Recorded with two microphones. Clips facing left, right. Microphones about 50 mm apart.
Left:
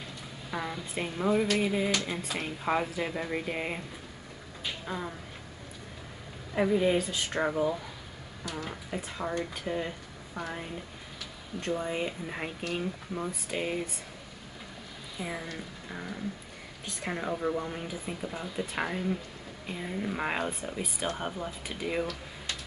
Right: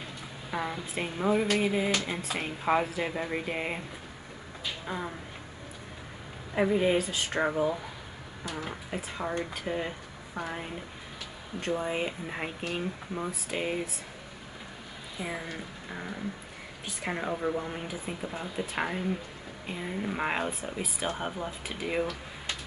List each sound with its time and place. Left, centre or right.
0.5 s speech: centre
4.8 s a sound: centre
6.5 s speech: centre
15.1 s speech: centre